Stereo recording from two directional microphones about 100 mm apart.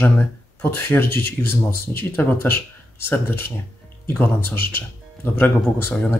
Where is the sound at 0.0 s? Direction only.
20° left (ahead or behind).